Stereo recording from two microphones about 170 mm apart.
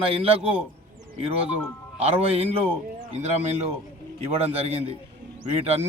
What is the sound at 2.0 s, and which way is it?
A man's voice, 35° right (ahead or behind).